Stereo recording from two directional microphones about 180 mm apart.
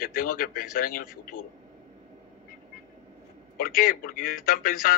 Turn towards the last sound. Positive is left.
turn(degrees=50)  # may be behind; listen again after turning